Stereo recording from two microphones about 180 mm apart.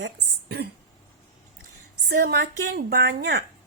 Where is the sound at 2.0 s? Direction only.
65° right (ahead or behind).